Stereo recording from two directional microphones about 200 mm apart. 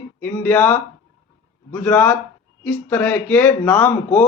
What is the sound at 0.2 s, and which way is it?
A man's voice, 10° left (ahead or behind).